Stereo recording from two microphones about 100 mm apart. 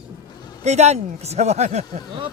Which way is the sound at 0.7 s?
90° right.